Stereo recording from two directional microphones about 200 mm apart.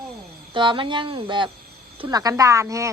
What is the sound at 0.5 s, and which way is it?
Speech, 25° right (ahead or behind).